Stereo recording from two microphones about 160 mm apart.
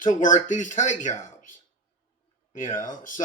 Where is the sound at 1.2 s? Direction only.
55° left (ahead or behind).